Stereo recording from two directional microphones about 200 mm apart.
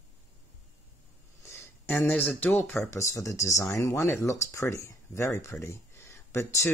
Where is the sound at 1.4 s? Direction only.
15° left (ahead or behind).